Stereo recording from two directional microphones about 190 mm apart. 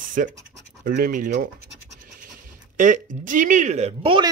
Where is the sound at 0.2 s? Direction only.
45° right (ahead or behind).